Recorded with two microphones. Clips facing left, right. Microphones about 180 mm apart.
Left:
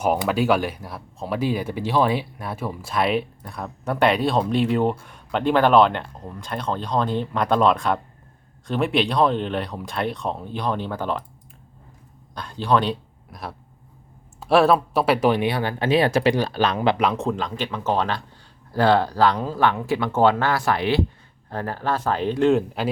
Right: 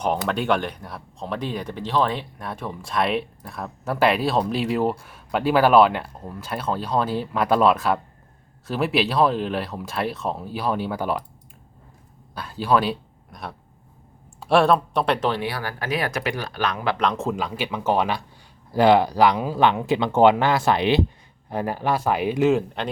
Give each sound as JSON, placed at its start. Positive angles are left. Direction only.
{"t": 0.0, "sound": "speech", "side_deg": 10}
{"t": 12.3, "sound": "speech", "side_deg": -5}
{"t": 17.0, "sound": "speech", "side_deg": 0}